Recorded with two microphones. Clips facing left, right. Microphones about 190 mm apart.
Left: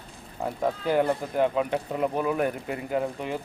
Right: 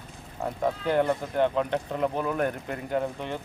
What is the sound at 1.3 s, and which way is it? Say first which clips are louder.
Speech: even; 5° left (ahead or behind).